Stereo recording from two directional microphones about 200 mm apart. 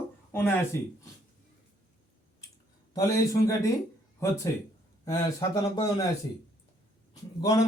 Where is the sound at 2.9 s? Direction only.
15° left (ahead or behind).